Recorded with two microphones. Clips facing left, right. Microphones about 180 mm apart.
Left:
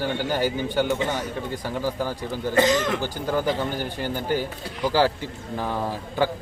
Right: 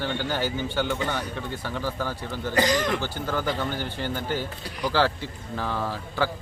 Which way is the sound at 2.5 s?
25° left (ahead or behind).